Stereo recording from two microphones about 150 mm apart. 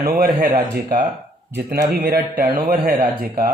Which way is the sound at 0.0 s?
70° right (ahead or behind).